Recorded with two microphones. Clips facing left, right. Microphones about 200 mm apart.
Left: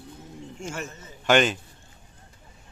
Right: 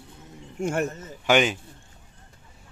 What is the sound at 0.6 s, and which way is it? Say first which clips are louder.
Speech: right 10 dB; 60° right (ahead or behind).